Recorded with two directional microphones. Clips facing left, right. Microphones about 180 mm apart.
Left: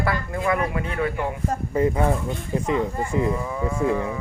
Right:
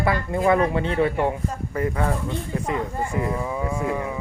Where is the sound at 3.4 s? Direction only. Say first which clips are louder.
Left 1 dB; 15° right (ahead or behind).